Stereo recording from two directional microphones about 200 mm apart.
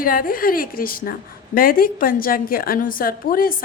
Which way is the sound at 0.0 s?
45° left (ahead or behind).